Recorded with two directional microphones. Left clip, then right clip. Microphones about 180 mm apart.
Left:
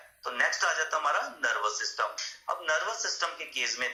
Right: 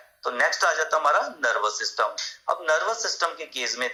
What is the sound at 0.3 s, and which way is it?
A man's voice, 55° right (ahead or behind).